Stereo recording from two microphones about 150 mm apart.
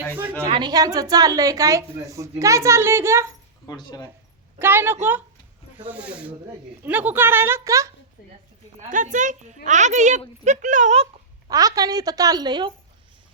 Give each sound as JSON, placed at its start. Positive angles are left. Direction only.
{"t": 0.4, "sound": "a woman's voice", "side_deg": -30}
{"t": 3.7, "sound": "speech", "side_deg": 25}
{"t": 4.6, "sound": "a woman's voice", "side_deg": -15}
{"t": 8.8, "sound": "a woman's voice", "side_deg": -55}
{"t": 11.4, "sound": "a woman's voice", "side_deg": -25}